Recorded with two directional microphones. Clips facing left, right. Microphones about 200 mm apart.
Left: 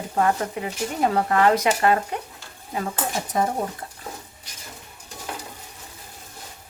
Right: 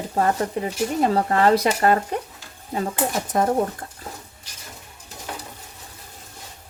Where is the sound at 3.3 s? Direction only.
50° right (ahead or behind).